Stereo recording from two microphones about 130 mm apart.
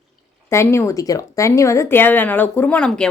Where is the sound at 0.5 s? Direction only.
20° left (ahead or behind).